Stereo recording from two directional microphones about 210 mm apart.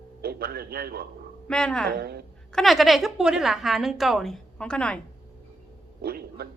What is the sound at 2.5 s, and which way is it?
A woman's voice, centre (ahead or behind).